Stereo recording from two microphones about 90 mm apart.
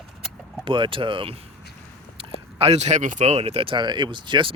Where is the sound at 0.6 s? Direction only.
70° right (ahead or behind).